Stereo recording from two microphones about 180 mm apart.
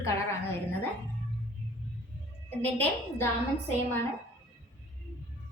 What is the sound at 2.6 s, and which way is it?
Speech, 10° left (ahead or behind).